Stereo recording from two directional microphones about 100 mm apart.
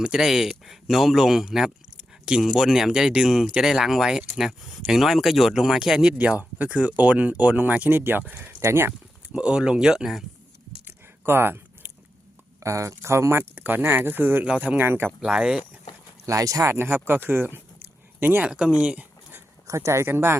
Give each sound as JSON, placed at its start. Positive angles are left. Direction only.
{"t": 0.0, "sound": "speech", "side_deg": -5}
{"t": 8.9, "sound": "speech", "side_deg": -10}
{"t": 11.3, "sound": "a sound", "side_deg": -20}
{"t": 12.5, "sound": "speech", "side_deg": -30}
{"t": 15.2, "sound": "speech", "side_deg": -10}
{"t": 16.2, "sound": "speech", "side_deg": -35}
{"t": 18.5, "sound": "speech", "side_deg": -10}
{"t": 19.6, "sound": "speech", "side_deg": -30}